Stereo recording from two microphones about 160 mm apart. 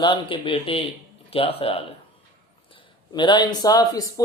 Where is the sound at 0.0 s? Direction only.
30° left (ahead or behind).